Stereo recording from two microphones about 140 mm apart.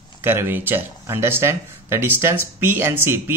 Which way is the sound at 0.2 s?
15° right (ahead or behind).